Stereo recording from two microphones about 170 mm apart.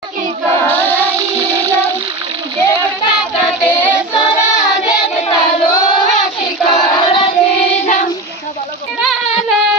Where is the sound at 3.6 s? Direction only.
10° left (ahead or behind).